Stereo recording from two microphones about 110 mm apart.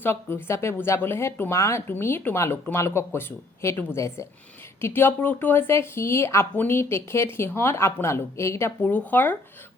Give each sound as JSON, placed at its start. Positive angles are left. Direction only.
{"t": 0.0, "sound": "speech", "side_deg": 20}